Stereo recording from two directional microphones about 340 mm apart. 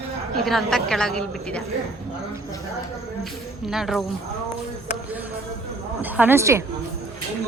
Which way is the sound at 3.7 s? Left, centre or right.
Centre.